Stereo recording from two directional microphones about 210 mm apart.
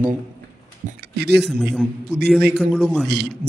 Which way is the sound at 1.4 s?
Centre (ahead or behind).